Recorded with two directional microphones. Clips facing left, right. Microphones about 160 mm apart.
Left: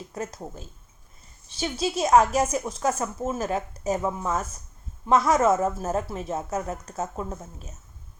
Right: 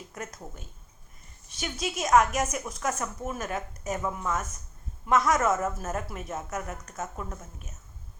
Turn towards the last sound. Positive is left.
turn(degrees=30)  # may be behind; listen again after turning